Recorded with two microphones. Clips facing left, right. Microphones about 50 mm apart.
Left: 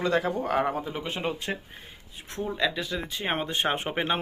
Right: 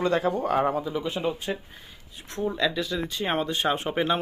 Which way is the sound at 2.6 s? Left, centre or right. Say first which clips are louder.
Even; centre.